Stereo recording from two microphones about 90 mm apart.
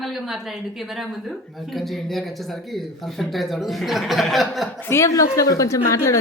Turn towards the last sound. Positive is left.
turn(degrees=35)  # may be behind; listen again after turning